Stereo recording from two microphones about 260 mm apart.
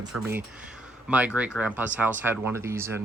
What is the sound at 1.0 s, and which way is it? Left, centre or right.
Speech, centre.